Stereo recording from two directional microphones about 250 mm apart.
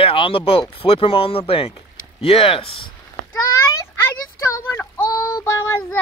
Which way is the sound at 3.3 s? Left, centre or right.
Centre.